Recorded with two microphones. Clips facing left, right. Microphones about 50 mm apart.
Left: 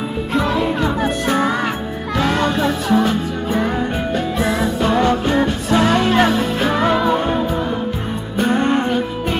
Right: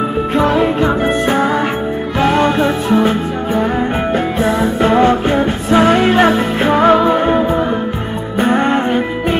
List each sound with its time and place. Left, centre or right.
0.6 s music: right